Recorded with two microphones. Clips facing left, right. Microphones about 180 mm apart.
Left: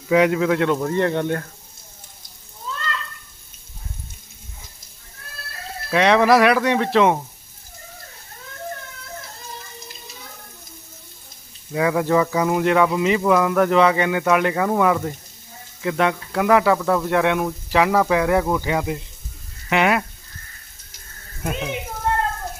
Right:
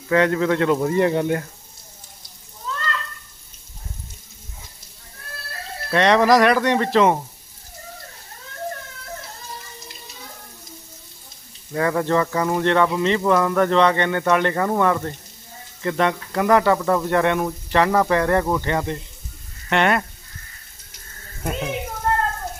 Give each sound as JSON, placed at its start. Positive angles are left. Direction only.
{"t": 0.1, "sound": "speech", "side_deg": 10}
{"t": 0.8, "sound": "speech", "side_deg": -10}
{"t": 5.9, "sound": "speech", "side_deg": 5}
{"t": 11.7, "sound": "speech", "side_deg": 5}
{"t": 21.4, "sound": "speech", "side_deg": 0}